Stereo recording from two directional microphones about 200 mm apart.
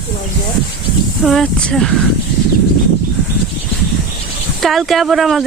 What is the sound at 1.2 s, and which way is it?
Speech, centre (ahead or behind).